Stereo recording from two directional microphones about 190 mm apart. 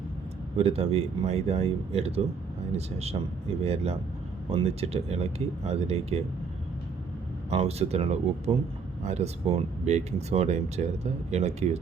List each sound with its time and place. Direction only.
0.5 s speech: 30° right (ahead or behind)
7.5 s speech: 30° right (ahead or behind)